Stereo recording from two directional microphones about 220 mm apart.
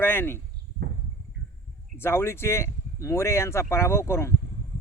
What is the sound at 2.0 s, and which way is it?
Speech, 10° left (ahead or behind).